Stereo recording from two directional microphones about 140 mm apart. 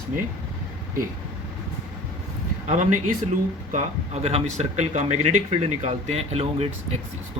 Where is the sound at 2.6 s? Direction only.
65° right (ahead or behind).